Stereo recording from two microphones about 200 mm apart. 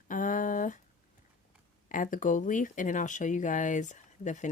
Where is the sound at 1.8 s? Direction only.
40° left (ahead or behind).